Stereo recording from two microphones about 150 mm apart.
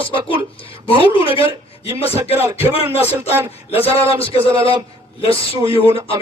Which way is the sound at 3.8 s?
40° left (ahead or behind).